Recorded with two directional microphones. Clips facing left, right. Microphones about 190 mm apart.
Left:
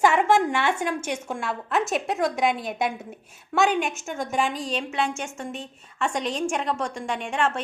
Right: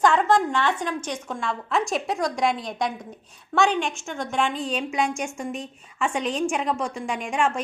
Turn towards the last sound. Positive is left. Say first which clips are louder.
# right 1 dB
turn(degrees=-10)  # may be behind; listen again after turning